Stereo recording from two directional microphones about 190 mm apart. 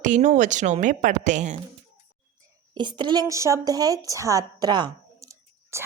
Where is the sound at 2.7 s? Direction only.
25° right (ahead or behind).